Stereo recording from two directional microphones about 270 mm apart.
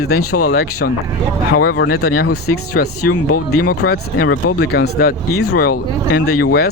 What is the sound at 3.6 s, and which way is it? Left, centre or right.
Speech, left.